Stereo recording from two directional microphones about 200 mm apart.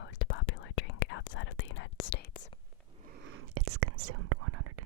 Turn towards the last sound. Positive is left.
turn(degrees=-90)